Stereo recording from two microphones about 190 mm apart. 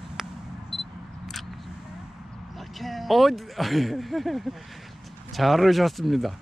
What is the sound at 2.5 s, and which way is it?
Speech, centre (ahead or behind).